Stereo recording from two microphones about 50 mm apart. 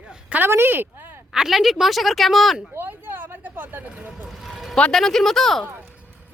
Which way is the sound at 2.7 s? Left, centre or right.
Right.